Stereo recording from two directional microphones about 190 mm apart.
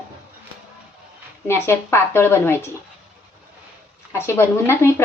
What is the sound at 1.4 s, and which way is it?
Speech, 15° left (ahead or behind).